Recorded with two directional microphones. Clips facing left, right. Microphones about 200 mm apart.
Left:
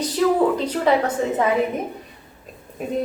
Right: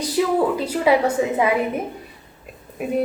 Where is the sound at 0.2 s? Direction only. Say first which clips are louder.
Left 2 dB; 5° right (ahead or behind).